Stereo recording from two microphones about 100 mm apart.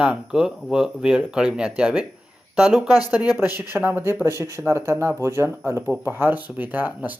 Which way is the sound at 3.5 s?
20° right (ahead or behind).